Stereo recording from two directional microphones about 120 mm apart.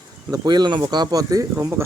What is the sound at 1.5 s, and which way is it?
Speech, 20° right (ahead or behind).